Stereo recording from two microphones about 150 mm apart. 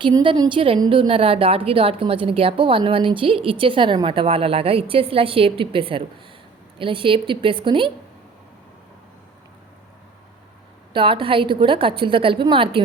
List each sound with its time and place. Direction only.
0.0 s a woman's voice: 35° right (ahead or behind)
10.9 s a woman's voice: 35° right (ahead or behind)